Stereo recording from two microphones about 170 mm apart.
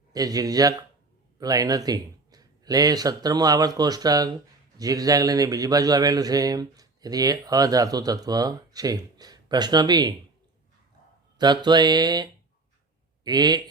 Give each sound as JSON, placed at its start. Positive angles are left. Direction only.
{"t": 0.1, "sound": "a man's voice", "side_deg": -20}
{"t": 11.3, "sound": "a man's voice", "side_deg": -25}